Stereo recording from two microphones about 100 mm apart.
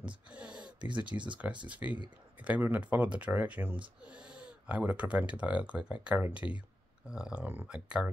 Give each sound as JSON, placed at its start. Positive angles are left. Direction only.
{"t": 0.3, "sound": "a sound", "side_deg": -10}
{"t": 1.1, "sound": "speech", "side_deg": -25}
{"t": 1.7, "sound": "speech", "side_deg": -15}